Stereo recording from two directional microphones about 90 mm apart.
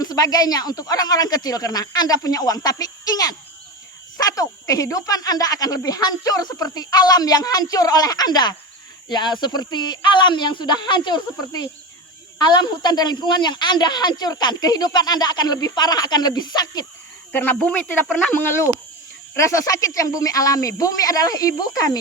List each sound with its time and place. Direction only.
0.0 s speech: 45° left (ahead or behind)
17.3 s speech: 20° left (ahead or behind)
18.4 s speech: 30° left (ahead or behind)